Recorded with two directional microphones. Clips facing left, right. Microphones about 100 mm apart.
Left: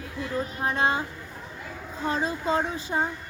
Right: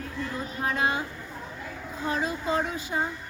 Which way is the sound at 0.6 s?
30° left (ahead or behind).